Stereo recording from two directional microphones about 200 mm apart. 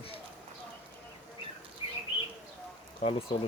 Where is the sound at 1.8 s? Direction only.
25° left (ahead or behind).